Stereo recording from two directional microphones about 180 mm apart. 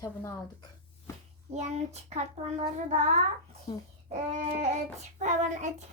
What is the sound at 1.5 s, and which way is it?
A child's voice, 40° right (ahead or behind).